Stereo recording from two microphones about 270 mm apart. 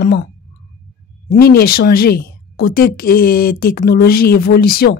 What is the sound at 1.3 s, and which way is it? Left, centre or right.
A woman's voice, left.